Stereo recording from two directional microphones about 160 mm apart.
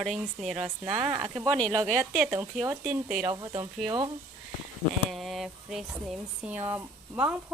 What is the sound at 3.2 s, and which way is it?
Speech, 25° right (ahead or behind).